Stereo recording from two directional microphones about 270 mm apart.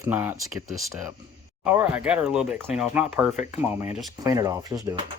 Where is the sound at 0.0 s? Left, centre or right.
Centre.